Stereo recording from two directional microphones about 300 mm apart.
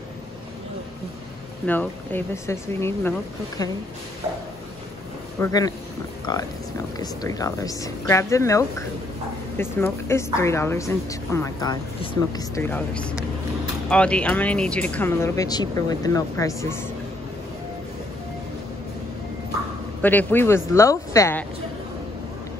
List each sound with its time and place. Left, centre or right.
1.7 s a woman's voice: centre
5.4 s a woman's voice: centre
20.0 s a woman's voice: centre